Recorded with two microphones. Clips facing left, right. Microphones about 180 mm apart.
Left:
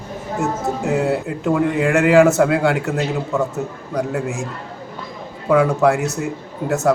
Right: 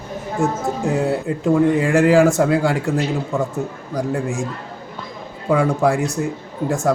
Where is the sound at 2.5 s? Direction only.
60° left (ahead or behind).